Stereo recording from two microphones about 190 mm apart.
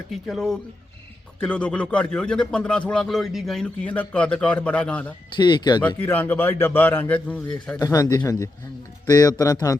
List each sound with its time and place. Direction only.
0.1 s a man's voice: centre (ahead or behind)
5.4 s speech: 25° left (ahead or behind)
6.0 s a man's voice: 10° left (ahead or behind)